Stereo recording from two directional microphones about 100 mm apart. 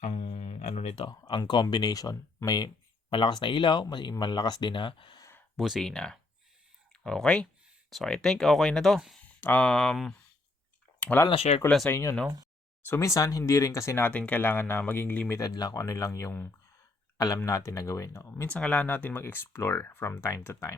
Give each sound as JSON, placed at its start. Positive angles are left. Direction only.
{"t": 0.1, "sound": "music", "side_deg": 75}
{"t": 1.1, "sound": "speech", "side_deg": 40}
{"t": 3.1, "sound": "speech", "side_deg": 50}
{"t": 5.5, "sound": "speech", "side_deg": 0}
{"t": 9.2, "sound": "speech", "side_deg": 15}
{"t": 11.0, "sound": "speech", "side_deg": 20}
{"t": 11.3, "sound": "speech", "side_deg": 80}
{"t": 11.9, "sound": "speech", "side_deg": 30}
{"t": 14.0, "sound": "speech", "side_deg": 15}
{"t": 15.4, "sound": "speech", "side_deg": 35}
{"t": 18.4, "sound": "speech", "side_deg": 10}